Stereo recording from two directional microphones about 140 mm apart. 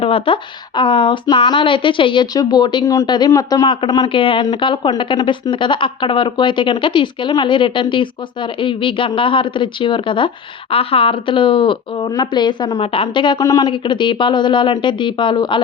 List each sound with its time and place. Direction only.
0.0 s speech: 40° left (ahead or behind)
13.4 s speech: 20° left (ahead or behind)
13.7 s speech: 35° left (ahead or behind)